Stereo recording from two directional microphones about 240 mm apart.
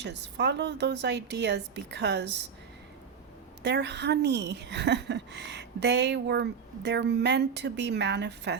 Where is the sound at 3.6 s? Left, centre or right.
Right.